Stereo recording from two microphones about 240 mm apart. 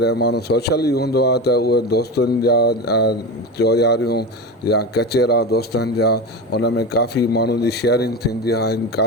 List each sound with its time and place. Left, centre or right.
0.0 s a man's voice: left